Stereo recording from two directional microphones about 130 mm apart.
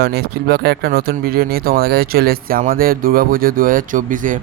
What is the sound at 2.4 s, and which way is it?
A man's voice, 90° right.